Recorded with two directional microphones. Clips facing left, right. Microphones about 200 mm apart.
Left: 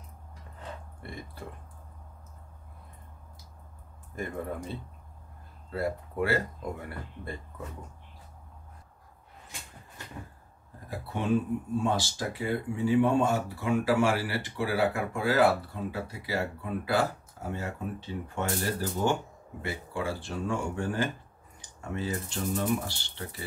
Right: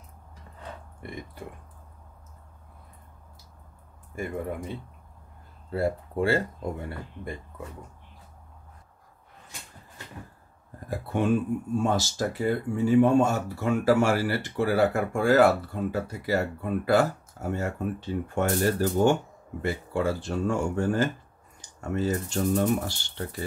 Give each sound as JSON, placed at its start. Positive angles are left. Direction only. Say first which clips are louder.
{"t": 4.1, "sound": "speech", "louder": "right 3 dB", "side_deg": -10}
{"t": 5.7, "sound": "speech", "louder": "right 4 dB", "side_deg": -25}
{"t": 11.8, "sound": "speech", "louder": "right 3 dB", "side_deg": -45}